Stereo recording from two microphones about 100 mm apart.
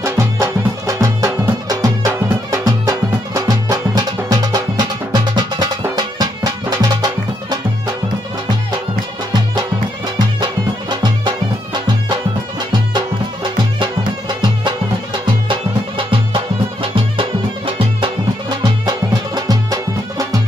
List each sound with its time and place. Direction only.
0.4 s music: 35° right (ahead or behind)
10.1 s music: 45° right (ahead or behind)
15.4 s music: 55° right (ahead or behind)
18.6 s music: 45° right (ahead or behind)